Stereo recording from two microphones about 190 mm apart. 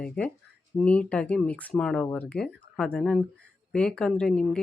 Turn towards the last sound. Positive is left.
turn(degrees=5)  # may be behind; listen again after turning